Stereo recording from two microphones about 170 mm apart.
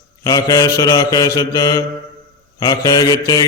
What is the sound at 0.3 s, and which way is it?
Mantra, 20° left (ahead or behind).